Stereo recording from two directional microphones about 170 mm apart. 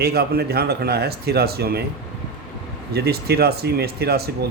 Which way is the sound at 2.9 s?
70° right (ahead or behind).